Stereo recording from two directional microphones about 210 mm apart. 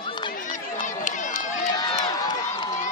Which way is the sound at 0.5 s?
35° left (ahead or behind).